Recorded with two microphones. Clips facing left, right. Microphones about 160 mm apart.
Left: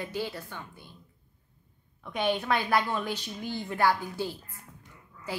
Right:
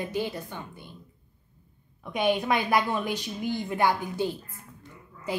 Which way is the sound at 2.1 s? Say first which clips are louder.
Right 3 dB; 10° right (ahead or behind).